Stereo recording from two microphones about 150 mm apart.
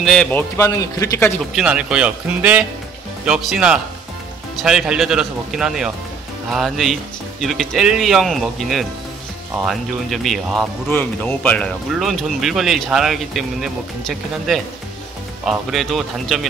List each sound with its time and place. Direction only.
0.0 s a man's voice: 5° left (ahead or behind); by 1.3 s 20° left (ahead or behind)
1.5 s speech: 5° right (ahead or behind)
10.9 s a man's voice: 15° left (ahead or behind)